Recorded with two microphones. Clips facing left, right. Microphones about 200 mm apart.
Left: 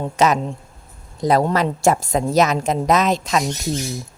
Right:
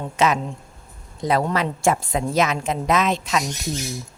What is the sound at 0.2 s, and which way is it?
A woman's voice, 40° left (ahead or behind).